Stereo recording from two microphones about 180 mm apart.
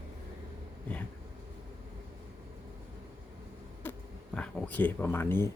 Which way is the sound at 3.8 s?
10° left (ahead or behind).